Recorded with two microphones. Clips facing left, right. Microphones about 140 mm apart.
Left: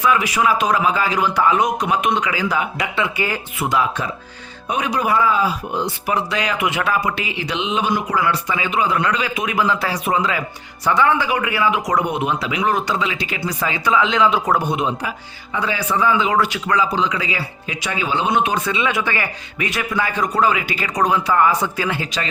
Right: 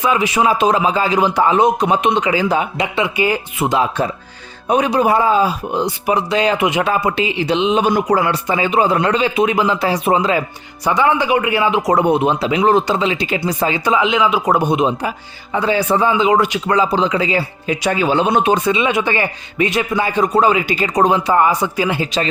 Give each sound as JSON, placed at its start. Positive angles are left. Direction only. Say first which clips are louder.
{"t": 0.0, "sound": "speech", "louder": "right 2 dB", "side_deg": -25}
{"t": 8.2, "sound": "speech", "louder": "right 4 dB", "side_deg": -30}
{"t": 10.8, "sound": "speech", "louder": "right 2 dB", "side_deg": -15}
{"t": 14.1, "sound": "speech", "louder": "right 2 dB", "side_deg": -5}
{"t": 14.5, "sound": "speech", "louder": "right 4 dB", "side_deg": -20}
{"t": 15.5, "sound": "a man's voice", "louder": "right 5 dB", "side_deg": -30}
{"t": 18.5, "sound": "speech", "louder": "right 5 dB", "side_deg": -20}